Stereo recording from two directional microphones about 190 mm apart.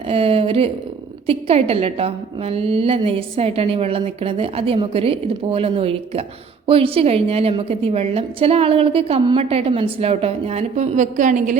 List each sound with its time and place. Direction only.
0.1 s a woman's voice: 30° right (ahead or behind)